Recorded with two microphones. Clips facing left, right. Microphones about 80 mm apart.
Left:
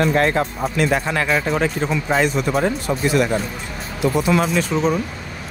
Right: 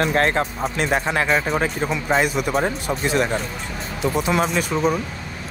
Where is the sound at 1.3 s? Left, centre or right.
Centre.